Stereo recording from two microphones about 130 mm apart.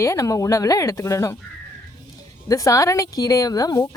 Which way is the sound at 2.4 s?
25° left (ahead or behind).